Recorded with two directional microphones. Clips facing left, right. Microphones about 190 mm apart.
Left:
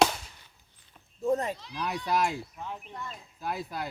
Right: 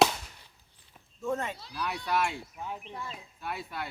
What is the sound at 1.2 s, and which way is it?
Speech, 35° left (ahead or behind).